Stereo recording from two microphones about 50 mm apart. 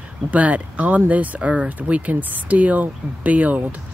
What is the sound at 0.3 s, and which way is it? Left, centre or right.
Speech, right.